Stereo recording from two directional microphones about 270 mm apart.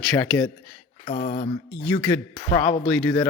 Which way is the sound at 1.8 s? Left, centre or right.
Centre.